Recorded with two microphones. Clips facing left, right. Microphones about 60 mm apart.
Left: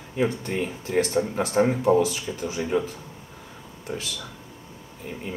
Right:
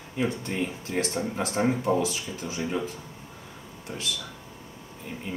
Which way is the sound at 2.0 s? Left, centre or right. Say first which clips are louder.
Left 4 dB; left.